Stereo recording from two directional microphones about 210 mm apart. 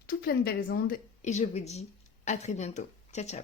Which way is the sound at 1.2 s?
35° left (ahead or behind).